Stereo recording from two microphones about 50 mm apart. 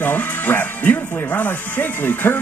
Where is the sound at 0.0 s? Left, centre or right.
Left.